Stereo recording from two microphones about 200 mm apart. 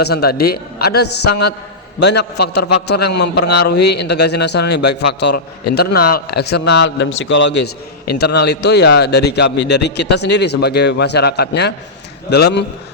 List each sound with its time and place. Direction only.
0.0 s a man's voice: 50° left (ahead or behind)
2.8 s a man's voice: 55° left (ahead or behind)